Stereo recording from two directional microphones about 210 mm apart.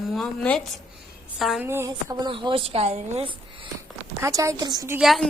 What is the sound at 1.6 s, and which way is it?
A woman's voice, 15° right (ahead or behind).